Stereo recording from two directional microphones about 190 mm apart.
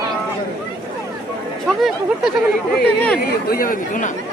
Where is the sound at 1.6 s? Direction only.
Centre (ahead or behind).